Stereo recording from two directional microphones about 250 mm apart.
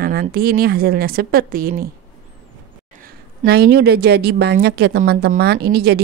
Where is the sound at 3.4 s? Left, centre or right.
Right.